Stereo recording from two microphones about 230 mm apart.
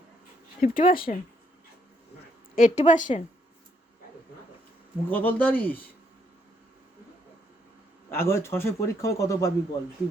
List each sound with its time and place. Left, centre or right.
0.6 s a woman's voice: left
2.6 s a woman's voice: left
5.0 s a man's voice: centre
8.1 s a man's voice: centre